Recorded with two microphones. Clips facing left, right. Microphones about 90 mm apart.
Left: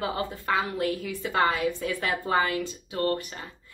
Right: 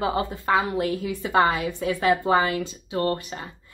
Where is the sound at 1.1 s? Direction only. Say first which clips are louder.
Right 6 dB; 25° right (ahead or behind).